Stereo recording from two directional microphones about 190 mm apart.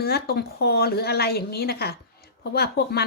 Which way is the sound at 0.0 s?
55° left (ahead or behind).